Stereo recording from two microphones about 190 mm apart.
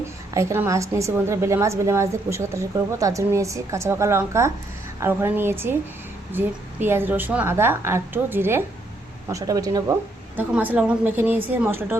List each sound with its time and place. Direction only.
0.3 s a woman's voice: 15° right (ahead or behind)